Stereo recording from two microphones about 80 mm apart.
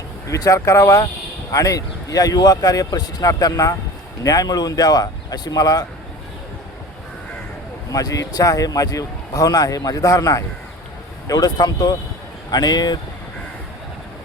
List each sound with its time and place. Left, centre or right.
0.3 s speech: left
7.9 s speech: left